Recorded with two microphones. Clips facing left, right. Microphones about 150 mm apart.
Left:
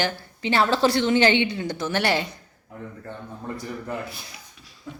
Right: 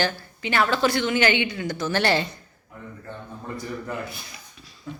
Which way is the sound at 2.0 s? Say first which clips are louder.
Right 1 dB; 15° left (ahead or behind).